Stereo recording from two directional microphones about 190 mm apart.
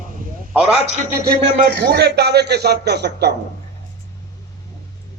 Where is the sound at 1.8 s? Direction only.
60° right (ahead or behind).